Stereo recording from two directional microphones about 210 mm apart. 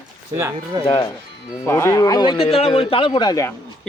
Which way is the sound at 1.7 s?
15° left (ahead or behind).